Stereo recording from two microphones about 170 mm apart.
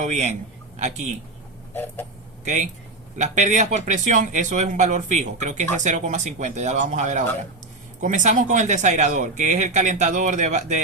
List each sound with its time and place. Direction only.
0.0 s speech: 45° right (ahead or behind)
1.7 s vehicle: 10° left (ahead or behind)
2.4 s speech: 45° right (ahead or behind)